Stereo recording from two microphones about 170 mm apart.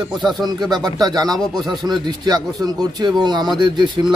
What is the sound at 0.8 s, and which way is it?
A man's voice, 25° right (ahead or behind).